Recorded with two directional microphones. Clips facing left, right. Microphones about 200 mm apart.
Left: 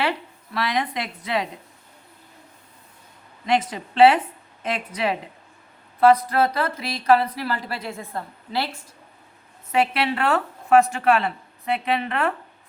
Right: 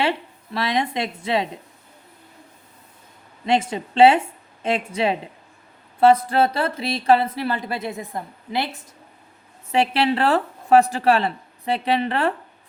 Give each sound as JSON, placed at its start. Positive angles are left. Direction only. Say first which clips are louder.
{"t": 0.0, "sound": "a woman's voice", "louder": "right 2 dB", "side_deg": -25}
{"t": 3.4, "sound": "speech", "louder": "right 2 dB", "side_deg": -25}
{"t": 9.7, "sound": "a woman's voice", "louder": "right 2 dB", "side_deg": -30}